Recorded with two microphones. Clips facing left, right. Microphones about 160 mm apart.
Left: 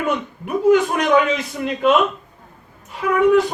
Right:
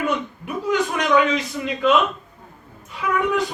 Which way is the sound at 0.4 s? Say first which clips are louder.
Left 8 dB; 50° left (ahead or behind).